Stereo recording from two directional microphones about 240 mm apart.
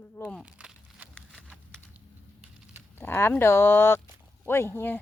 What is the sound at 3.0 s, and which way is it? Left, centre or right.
Speech, centre.